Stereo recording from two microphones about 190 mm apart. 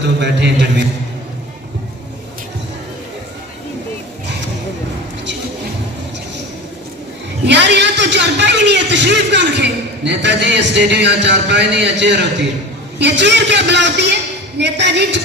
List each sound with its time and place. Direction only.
0.2 s a man's voice: 65° right (ahead or behind)
7.4 s a man's voice: 65° right (ahead or behind)